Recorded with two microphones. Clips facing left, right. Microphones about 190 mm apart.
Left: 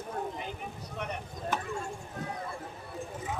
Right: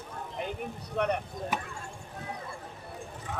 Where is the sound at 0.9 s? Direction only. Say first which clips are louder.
Right 10 dB; 65° right (ahead or behind).